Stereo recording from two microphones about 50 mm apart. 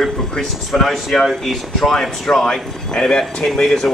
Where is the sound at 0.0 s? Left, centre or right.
Centre.